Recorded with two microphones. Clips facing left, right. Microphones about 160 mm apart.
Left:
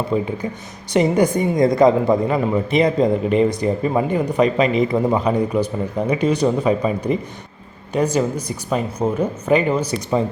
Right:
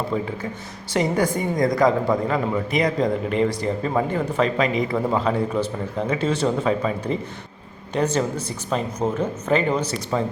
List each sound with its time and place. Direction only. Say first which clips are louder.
0.1 s a woman's voice: left 4 dB; 15° left (ahead or behind)